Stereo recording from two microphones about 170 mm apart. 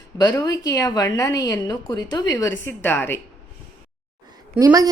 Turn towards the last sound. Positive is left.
turn(degrees=-20)  # may be behind; listen again after turning